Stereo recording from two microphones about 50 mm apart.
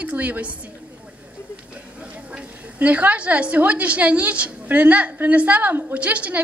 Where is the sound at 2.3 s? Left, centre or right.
Right.